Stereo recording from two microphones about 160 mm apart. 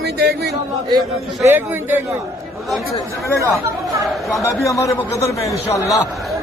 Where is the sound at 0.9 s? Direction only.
25° right (ahead or behind).